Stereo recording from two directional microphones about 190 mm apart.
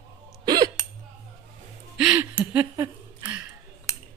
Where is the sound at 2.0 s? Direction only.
5° right (ahead or behind).